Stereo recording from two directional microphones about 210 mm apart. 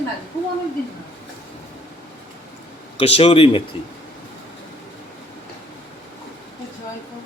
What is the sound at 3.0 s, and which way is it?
Speech, 30° left (ahead or behind).